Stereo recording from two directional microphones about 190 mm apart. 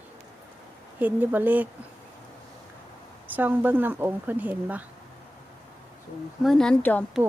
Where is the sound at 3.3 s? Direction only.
10° right (ahead or behind).